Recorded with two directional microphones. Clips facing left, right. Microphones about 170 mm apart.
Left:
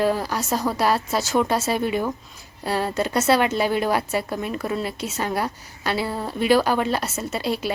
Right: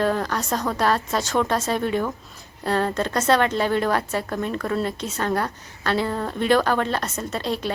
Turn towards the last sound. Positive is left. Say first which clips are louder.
# left 1 dB
turn(degrees=10)  # may be behind; listen again after turning